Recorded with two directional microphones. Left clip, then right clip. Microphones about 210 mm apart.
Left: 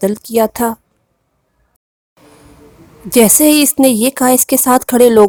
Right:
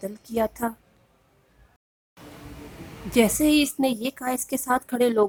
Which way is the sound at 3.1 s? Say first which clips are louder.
Left 11 dB; 50° left (ahead or behind).